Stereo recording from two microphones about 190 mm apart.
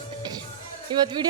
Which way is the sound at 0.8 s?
25° right (ahead or behind).